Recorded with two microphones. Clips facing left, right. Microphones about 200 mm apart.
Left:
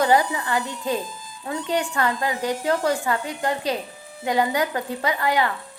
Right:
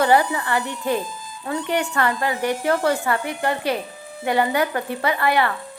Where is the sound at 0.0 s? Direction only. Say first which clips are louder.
Right 2 dB; 15° left (ahead or behind).